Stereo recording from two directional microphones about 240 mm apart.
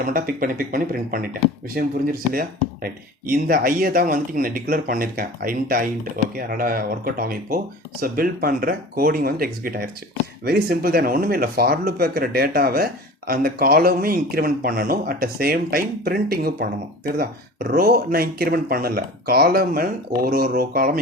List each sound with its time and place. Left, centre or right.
0.0 s speech: right